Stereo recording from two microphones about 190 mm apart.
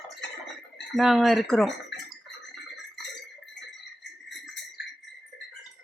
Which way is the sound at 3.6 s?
65° left (ahead or behind).